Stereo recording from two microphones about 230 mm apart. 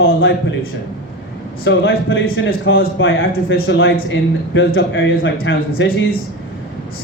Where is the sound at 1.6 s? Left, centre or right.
Left.